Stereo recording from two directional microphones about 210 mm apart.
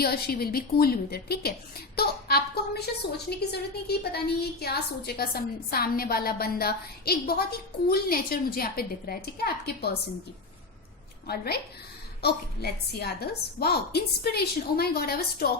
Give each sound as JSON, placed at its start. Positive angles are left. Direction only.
{"t": 0.0, "sound": "a woman's voice", "side_deg": 45}
{"t": 11.3, "sound": "a woman's voice", "side_deg": 50}